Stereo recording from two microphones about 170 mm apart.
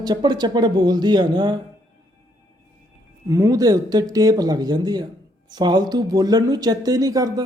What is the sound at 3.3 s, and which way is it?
Speech, 20° right (ahead or behind).